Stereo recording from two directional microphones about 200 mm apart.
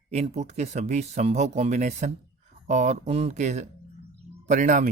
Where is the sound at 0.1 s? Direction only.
30° right (ahead or behind).